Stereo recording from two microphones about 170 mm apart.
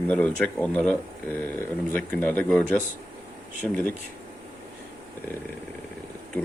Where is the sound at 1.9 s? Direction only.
10° left (ahead or behind).